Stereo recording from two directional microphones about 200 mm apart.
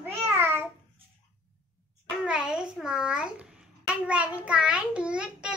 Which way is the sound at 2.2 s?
5° right (ahead or behind).